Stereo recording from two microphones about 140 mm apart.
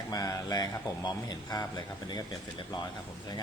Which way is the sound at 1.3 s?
25° left (ahead or behind).